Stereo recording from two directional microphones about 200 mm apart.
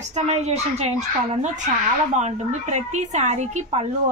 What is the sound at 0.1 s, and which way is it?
A woman's voice, 35° right (ahead or behind).